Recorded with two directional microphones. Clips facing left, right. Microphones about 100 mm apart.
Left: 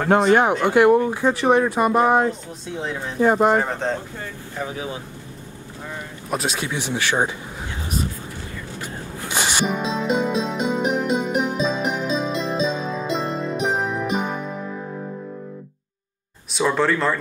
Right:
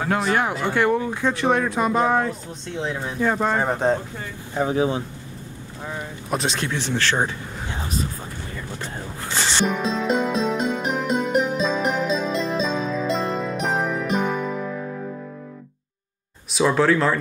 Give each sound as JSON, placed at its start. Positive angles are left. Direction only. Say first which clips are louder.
{"t": 0.1, "sound": "speech", "louder": "left 7 dB", "side_deg": 30}
{"t": 0.7, "sound": "speech", "louder": "left 6 dB", "side_deg": 15}
{"t": 0.9, "sound": "speech", "louder": "left 4 dB", "side_deg": 5}
{"t": 3.3, "sound": "speech", "louder": "left 5 dB", "side_deg": 20}
{"t": 3.6, "sound": "speech", "louder": "right 4 dB", "side_deg": -15}
{"t": 4.6, "sound": "speech", "louder": "right 8 dB", "side_deg": -30}
{"t": 6.3, "sound": "speech", "louder": "even", "side_deg": 5}
{"t": 8.8, "sound": "music", "louder": "even", "side_deg": 15}
{"t": 16.5, "sound": "speech", "louder": "right 2 dB", "side_deg": 0}